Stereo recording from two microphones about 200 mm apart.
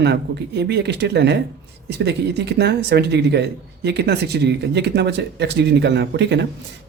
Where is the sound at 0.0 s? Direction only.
55° right (ahead or behind).